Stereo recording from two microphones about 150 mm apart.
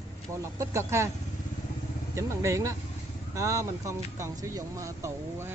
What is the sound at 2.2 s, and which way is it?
Speech, 20° right (ahead or behind).